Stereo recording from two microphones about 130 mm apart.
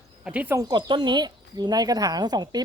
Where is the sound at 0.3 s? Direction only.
10° right (ahead or behind).